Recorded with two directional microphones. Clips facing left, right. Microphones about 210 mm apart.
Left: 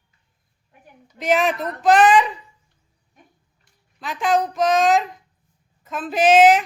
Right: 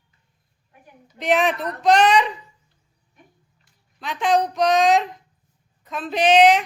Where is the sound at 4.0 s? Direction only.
Centre (ahead or behind).